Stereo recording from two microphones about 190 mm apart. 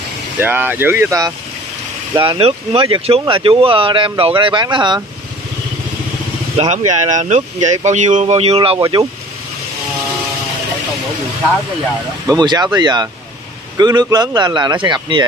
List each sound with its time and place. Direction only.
0.4 s speech: 10° right (ahead or behind)
2.1 s speech: 25° right (ahead or behind)
6.5 s speech: 35° right (ahead or behind)
12.3 s speech: 20° right (ahead or behind)